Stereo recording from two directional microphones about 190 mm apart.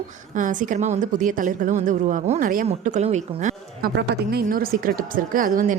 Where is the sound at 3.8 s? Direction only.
55° right (ahead or behind).